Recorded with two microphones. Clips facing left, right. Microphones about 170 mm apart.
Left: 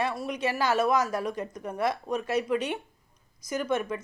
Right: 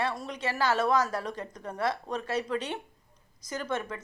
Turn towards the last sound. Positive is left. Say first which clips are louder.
# left 5 dB
turn(degrees=15)  # may be behind; listen again after turning